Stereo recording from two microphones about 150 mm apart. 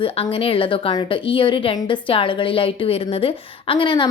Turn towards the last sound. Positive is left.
turn(degrees=35)  # may be behind; listen again after turning